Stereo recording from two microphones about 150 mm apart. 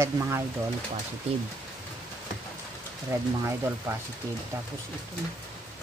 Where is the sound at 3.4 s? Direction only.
15° right (ahead or behind).